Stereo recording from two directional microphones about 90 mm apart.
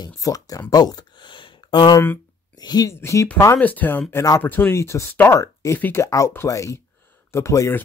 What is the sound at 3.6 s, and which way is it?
Speech, 20° left (ahead or behind).